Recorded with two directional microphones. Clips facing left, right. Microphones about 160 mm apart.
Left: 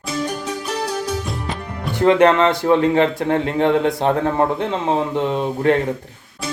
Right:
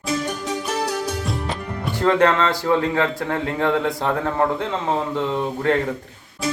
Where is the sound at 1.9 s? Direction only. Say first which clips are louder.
Left 4 dB; 20° left (ahead or behind).